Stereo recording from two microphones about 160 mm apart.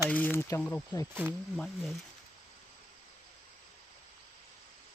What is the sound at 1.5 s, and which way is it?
Speech, centre (ahead or behind).